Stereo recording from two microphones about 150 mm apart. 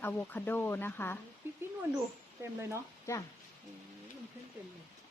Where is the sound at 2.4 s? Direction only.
20° right (ahead or behind).